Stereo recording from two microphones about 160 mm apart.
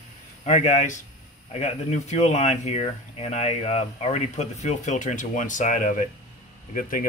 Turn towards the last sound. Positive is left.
turn(degrees=55)  # may be behind; listen again after turning